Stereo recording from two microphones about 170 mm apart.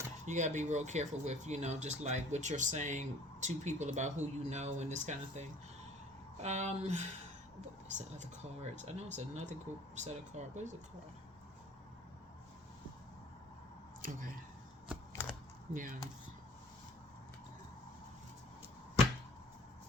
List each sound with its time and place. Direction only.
0.3 s speech: 45° right (ahead or behind)
14.0 s speech: 55° right (ahead or behind)
15.7 s speech: 50° right (ahead or behind)